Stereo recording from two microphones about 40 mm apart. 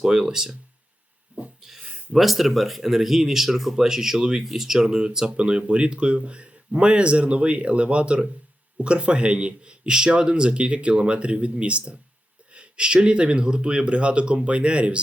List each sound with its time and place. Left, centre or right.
0.0 s speech: centre
1.3 s a sound: right
1.6 s speech: centre; by 15.0 s right